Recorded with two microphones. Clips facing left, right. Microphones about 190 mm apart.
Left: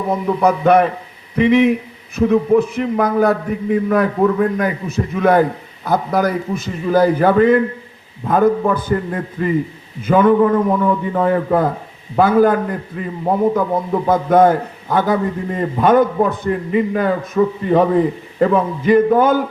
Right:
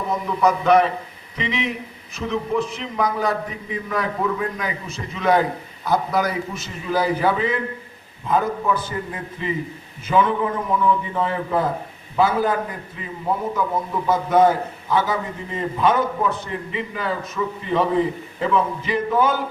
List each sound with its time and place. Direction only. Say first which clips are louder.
0.1 s a man's voice: left 4 dB; 55° left (ahead or behind)